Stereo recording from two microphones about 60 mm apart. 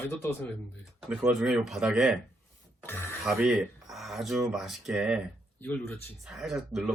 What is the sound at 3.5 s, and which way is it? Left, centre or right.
Speech, centre.